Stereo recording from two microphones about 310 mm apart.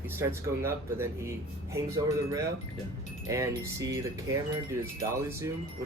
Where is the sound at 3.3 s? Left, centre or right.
Centre.